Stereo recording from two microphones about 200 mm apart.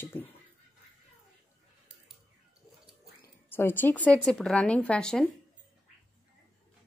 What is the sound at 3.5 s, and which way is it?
Speech, 10° left (ahead or behind).